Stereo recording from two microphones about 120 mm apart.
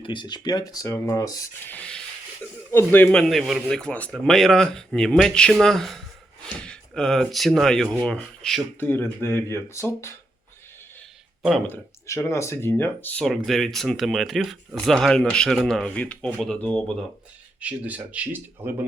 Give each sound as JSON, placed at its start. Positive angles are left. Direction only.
{"t": 0.0, "sound": "speech", "side_deg": 40}
{"t": 1.6, "sound": "speech", "side_deg": 10}
{"t": 3.1, "sound": "speech", "side_deg": 5}
{"t": 8.8, "sound": "speech", "side_deg": 15}
{"t": 11.7, "sound": "speech", "side_deg": 25}
{"t": 13.2, "sound": "speech", "side_deg": 0}
{"t": 17.6, "sound": "speech", "side_deg": -10}